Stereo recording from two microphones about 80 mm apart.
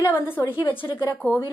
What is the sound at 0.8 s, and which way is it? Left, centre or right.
Speech, left.